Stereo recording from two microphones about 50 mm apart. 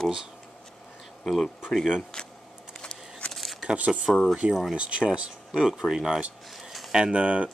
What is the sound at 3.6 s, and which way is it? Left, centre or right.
Speech, right.